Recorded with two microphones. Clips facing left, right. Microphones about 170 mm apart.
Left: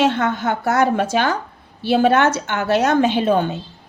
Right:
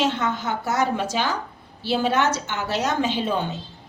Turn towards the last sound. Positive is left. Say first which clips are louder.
# left 7 dB
turn(degrees=60)  # may be behind; listen again after turning